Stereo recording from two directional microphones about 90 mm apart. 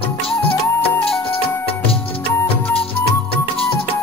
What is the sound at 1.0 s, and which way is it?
Music, 90° left.